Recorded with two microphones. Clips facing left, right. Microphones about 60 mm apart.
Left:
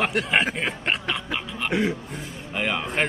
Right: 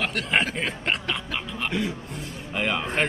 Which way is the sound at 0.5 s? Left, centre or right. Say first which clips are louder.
Left 1 dB; centre.